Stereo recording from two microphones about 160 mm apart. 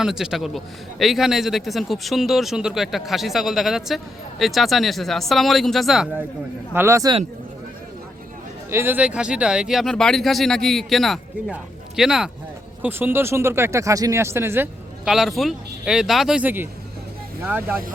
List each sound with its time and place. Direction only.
0.0 s a man's voice: 5° right (ahead or behind)
6.7 s a man's voice: 15° right (ahead or behind)
8.7 s a man's voice: 15° right (ahead or behind)
12.8 s speech: 15° right (ahead or behind)
15.0 s a man's voice: centre (ahead or behind)